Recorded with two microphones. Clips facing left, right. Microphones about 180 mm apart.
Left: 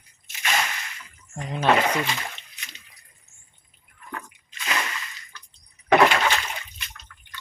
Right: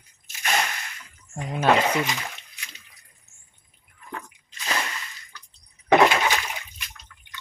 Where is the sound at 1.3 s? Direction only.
5° right (ahead or behind).